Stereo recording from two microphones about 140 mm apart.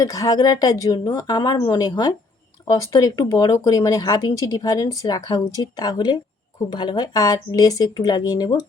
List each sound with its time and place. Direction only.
0.0 s speech: 25° left (ahead or behind)